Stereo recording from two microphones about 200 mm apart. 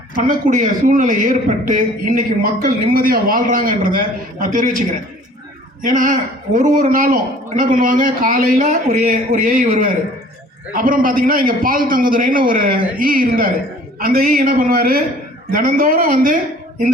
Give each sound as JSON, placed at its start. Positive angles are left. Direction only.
{"t": 0.2, "sound": "a man's voice", "side_deg": -40}